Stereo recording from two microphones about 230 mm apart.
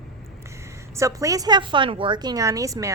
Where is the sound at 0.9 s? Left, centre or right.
Centre.